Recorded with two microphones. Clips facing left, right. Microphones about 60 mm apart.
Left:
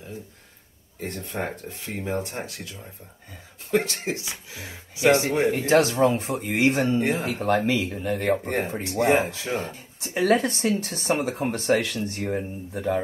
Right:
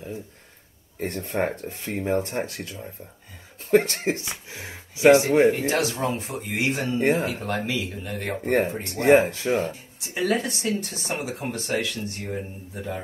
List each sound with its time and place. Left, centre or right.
1.0 s speech: right
2.0 s speech: right
5.7 s speech: left
7.0 s speech: right
7.3 s speech: left
9.0 s speech: right
9.7 s speech: left